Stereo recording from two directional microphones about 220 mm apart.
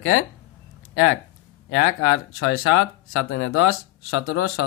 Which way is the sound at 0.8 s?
60° left (ahead or behind).